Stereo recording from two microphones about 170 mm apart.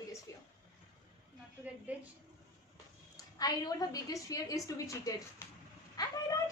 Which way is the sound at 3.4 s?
20° left (ahead or behind).